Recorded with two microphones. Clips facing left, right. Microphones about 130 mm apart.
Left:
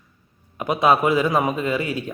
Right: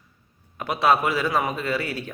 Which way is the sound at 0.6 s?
20° left (ahead or behind).